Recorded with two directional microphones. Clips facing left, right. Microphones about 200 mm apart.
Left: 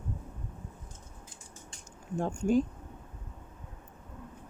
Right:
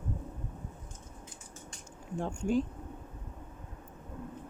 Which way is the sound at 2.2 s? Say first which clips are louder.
Left 3 dB; 45° left (ahead or behind).